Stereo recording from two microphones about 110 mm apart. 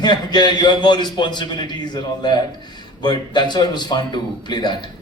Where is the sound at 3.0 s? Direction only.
40° left (ahead or behind).